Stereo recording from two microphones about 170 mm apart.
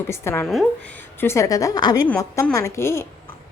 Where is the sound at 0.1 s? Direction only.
15° left (ahead or behind).